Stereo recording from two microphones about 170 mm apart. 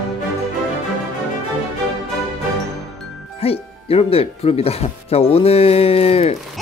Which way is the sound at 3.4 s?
35° left (ahead or behind).